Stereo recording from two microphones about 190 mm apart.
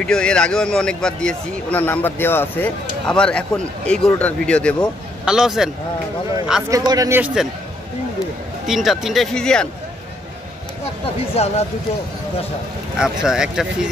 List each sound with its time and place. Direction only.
0.0 s a man's voice: 5° left (ahead or behind)
6.9 s a man's voice: 15° right (ahead or behind)
8.6 s speech: centre (ahead or behind)
11.3 s speech: 35° left (ahead or behind)
12.9 s speech: 5° right (ahead or behind)